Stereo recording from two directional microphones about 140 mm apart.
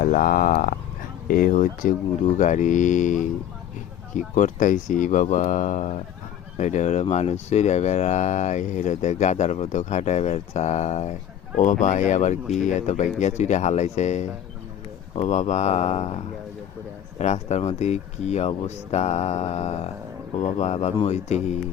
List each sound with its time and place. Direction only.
0.0 s speech: 90° left
1.3 s speech: 75° left (ahead or behind)
2.2 s speech: 60° left (ahead or behind)
4.4 s speech: 65° left (ahead or behind); by 16.1 s 50° left (ahead or behind)
17.2 s speech: 55° left (ahead or behind)